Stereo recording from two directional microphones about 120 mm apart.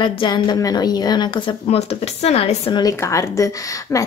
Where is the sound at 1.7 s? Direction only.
60° left (ahead or behind).